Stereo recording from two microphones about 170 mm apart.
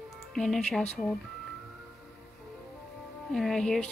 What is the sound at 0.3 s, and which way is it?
Speech, 5° left (ahead or behind).